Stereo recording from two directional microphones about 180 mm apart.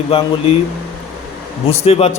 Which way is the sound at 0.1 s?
35° left (ahead or behind).